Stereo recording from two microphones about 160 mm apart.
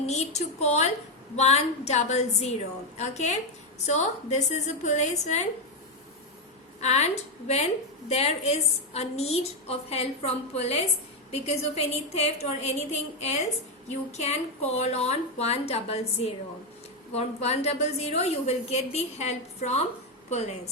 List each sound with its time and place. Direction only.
0.0 s a woman's voice: 45° left (ahead or behind)
6.7 s a woman's voice: 45° left (ahead or behind)